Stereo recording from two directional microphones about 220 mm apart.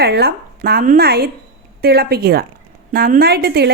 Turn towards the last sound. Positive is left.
turn(degrees=-45)  # may be behind; listen again after turning